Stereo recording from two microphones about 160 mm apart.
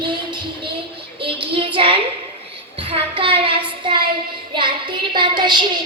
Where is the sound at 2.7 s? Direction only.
35° right (ahead or behind).